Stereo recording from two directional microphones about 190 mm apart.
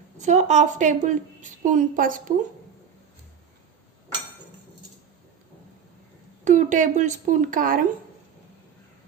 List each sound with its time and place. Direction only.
0.2 s a woman's voice: 40° right (ahead or behind)
6.4 s a woman's voice: 40° right (ahead or behind)